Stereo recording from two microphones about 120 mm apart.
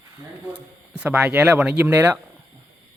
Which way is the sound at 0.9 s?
10° right (ahead or behind).